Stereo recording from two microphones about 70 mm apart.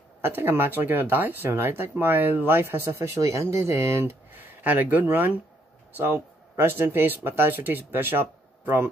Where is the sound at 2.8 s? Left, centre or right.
Right.